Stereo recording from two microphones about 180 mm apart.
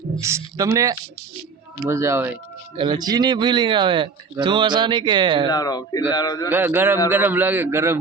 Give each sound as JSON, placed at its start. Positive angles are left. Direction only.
{"t": 0.2, "sound": "a man's voice", "side_deg": -15}
{"t": 5.5, "sound": "a man's voice", "side_deg": 20}
{"t": 6.5, "sound": "a man's voice", "side_deg": -10}